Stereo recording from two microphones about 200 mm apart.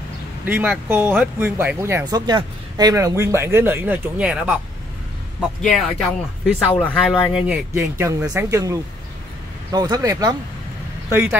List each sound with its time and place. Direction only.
0.5 s speech: 10° right (ahead or behind)